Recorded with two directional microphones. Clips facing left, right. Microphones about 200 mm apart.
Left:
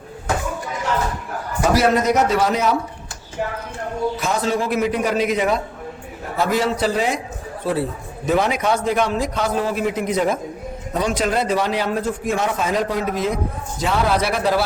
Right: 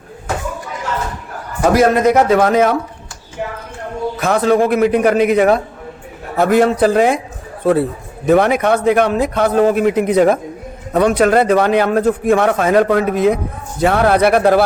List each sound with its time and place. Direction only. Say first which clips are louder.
1.7 s a man's voice: right 5 dB; 50° right (ahead or behind)
4.2 s a man's voice: right 12 dB; 55° right (ahead or behind)